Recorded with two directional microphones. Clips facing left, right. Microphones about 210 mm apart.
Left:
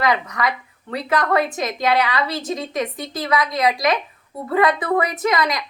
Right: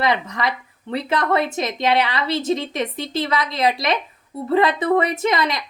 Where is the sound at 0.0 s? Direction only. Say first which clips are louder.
Even; 25° right (ahead or behind).